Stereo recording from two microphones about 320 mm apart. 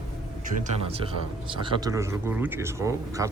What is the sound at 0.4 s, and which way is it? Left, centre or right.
Speech, right.